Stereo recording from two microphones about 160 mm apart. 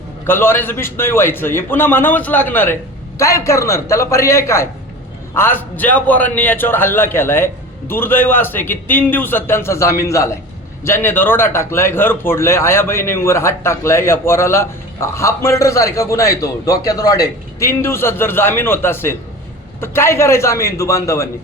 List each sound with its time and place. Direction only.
0.3 s a man's voice: 15° left (ahead or behind)